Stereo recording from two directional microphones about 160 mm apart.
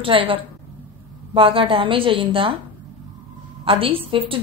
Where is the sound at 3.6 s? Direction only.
35° right (ahead or behind).